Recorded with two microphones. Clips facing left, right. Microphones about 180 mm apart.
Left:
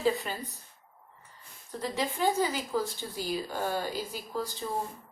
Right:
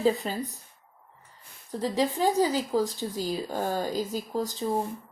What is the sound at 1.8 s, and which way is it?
A woman's voice, 35° right (ahead or behind).